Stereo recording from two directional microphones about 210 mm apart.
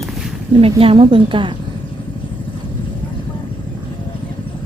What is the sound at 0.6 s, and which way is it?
Speech, 25° right (ahead or behind).